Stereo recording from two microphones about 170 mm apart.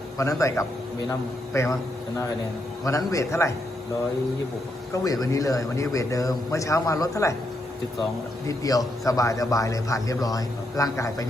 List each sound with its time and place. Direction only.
0.2 s a man's voice: 20° left (ahead or behind)
2.8 s a man's voice: 20° left (ahead or behind)
5.0 s a man's voice: 20° left (ahead or behind)
8.4 s a man's voice: 20° left (ahead or behind)